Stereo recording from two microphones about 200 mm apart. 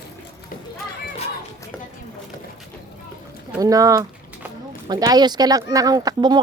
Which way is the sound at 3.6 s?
15° right (ahead or behind).